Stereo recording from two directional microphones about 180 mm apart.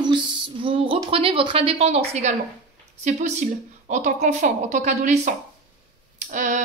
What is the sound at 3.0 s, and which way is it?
Speech, 40° right (ahead or behind).